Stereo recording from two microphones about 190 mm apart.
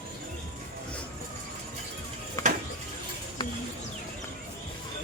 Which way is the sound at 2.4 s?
15° left (ahead or behind).